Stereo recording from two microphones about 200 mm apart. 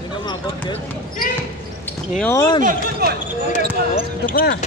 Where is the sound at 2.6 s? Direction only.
45° right (ahead or behind).